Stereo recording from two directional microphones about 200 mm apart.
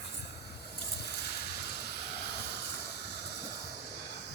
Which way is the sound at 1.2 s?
55° left (ahead or behind).